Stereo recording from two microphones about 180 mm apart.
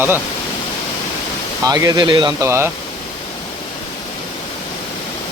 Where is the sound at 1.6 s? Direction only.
20° right (ahead or behind).